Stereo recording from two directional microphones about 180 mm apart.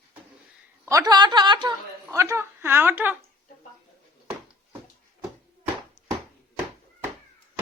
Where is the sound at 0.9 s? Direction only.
20° right (ahead or behind).